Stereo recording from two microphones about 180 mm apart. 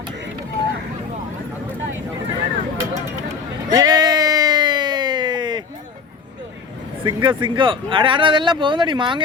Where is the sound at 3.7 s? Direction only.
20° right (ahead or behind).